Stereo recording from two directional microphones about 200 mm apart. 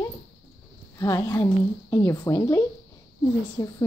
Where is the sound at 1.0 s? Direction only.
15° left (ahead or behind).